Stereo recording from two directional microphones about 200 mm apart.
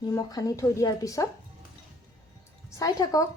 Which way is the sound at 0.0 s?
20° left (ahead or behind).